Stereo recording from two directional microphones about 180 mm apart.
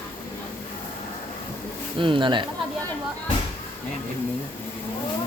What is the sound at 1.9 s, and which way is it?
Speech, 30° right (ahead or behind).